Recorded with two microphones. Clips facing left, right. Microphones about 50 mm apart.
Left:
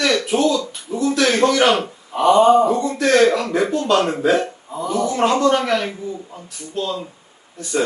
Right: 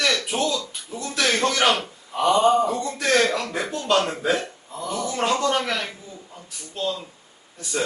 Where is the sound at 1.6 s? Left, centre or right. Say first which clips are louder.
Left 5 dB; centre.